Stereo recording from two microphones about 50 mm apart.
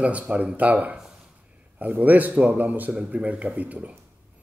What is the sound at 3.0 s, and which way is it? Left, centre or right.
Speech, centre.